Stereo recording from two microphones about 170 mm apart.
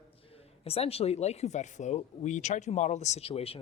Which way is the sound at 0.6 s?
35° left (ahead or behind).